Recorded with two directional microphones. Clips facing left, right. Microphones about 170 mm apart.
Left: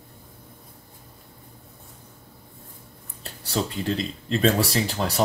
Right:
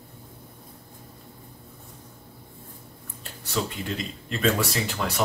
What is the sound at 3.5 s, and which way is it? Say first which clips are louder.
Speech: left 3 dB; 35° left (ahead or behind).